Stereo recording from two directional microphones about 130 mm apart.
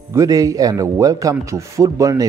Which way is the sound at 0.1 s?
25° right (ahead or behind).